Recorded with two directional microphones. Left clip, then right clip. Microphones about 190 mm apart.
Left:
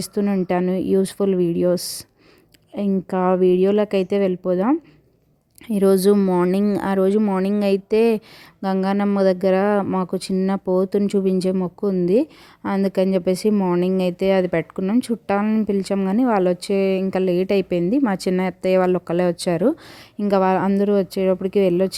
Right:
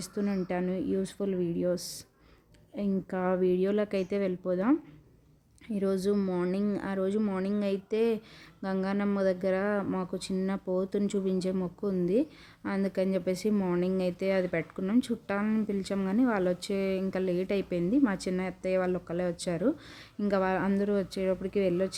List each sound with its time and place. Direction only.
0.0 s speech: 40° left (ahead or behind)
5.6 s speech: 45° left (ahead or behind)